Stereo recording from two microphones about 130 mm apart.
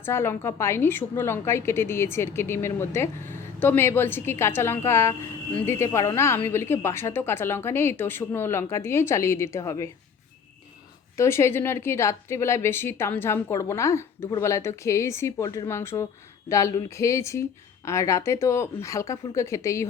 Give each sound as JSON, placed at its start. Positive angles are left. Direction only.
{"t": 0.0, "sound": "a woman's voice", "side_deg": 20}
{"t": 11.2, "sound": "a woman's voice", "side_deg": 20}